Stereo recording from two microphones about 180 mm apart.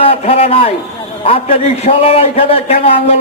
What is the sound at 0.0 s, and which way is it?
A man's voice, 35° left (ahead or behind).